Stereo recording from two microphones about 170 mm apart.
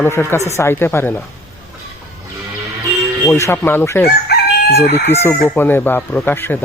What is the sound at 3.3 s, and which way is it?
Speech, 15° left (ahead or behind).